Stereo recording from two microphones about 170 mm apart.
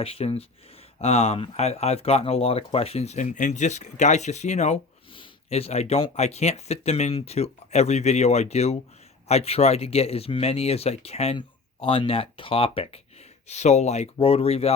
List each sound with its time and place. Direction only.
0.0 s speech: 35° left (ahead or behind)